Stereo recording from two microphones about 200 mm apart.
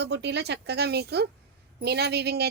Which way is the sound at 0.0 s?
60° right (ahead or behind).